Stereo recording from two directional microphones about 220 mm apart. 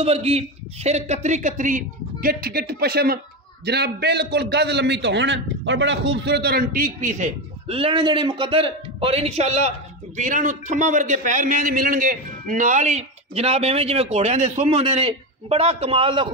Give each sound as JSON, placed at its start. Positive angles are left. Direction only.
{"t": 0.0, "sound": "a man's voice", "side_deg": -30}